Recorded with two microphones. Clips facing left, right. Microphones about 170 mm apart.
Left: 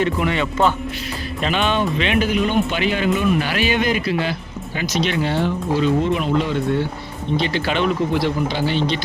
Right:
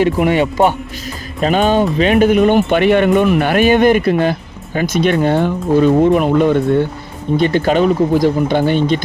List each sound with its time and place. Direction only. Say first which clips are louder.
1.4 s speech: right 7 dB; 40° right (ahead or behind)